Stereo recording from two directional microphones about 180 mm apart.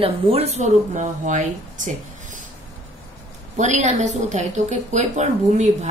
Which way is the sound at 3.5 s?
40° right (ahead or behind).